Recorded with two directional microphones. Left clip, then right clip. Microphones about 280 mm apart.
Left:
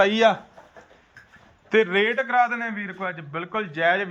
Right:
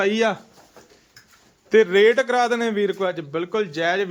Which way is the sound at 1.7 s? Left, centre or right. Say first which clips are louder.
Right 5 dB; centre.